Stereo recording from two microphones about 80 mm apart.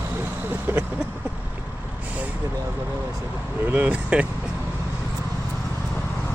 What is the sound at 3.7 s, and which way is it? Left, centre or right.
Speech, centre.